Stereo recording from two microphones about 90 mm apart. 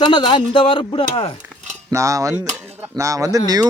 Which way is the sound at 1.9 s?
35° right (ahead or behind).